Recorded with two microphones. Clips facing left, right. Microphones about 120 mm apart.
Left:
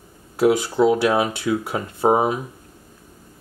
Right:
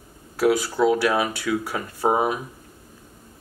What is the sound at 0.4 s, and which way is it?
Speech, 20° left (ahead or behind).